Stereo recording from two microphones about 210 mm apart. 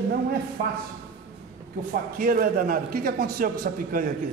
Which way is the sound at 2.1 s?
40° right (ahead or behind).